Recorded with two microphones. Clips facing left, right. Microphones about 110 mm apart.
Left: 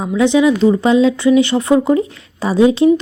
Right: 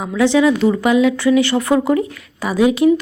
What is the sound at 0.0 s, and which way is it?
Speech, 20° left (ahead or behind).